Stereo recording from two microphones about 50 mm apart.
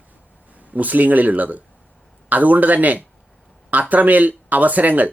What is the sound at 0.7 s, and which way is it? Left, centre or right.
Speech, right.